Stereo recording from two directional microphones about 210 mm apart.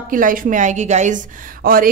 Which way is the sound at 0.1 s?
40° right (ahead or behind).